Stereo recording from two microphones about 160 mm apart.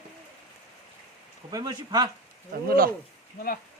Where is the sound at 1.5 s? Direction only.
25° right (ahead or behind).